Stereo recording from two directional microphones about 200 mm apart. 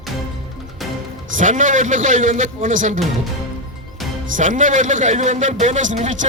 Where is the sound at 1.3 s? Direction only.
40° right (ahead or behind).